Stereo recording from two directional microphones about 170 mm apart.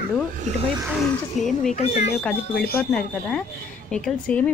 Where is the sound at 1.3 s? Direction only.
Centre (ahead or behind).